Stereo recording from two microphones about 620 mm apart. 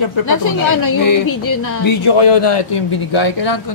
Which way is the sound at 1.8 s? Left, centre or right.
Left.